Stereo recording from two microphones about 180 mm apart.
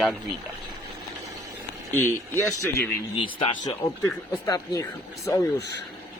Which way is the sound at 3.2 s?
30° left (ahead or behind).